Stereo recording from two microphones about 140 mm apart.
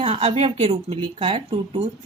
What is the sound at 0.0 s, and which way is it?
A woman's voice, 45° right (ahead or behind).